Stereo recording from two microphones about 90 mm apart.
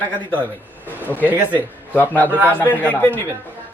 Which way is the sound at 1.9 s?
20° left (ahead or behind).